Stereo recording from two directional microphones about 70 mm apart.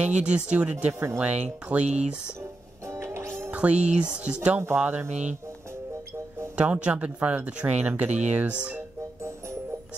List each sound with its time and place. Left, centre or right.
0.0 s speech: centre
2.9 s music: right
3.5 s speech: centre
6.5 s speech: centre